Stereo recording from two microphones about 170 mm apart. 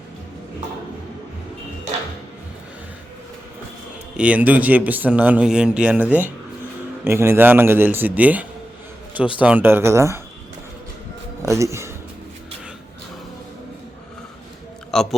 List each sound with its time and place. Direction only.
4.2 s speech: 10° right (ahead or behind)
11.4 s speech: 15° right (ahead or behind)
14.9 s speech: 5° left (ahead or behind)